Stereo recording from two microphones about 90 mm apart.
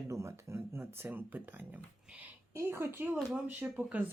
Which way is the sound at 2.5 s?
30° right (ahead or behind).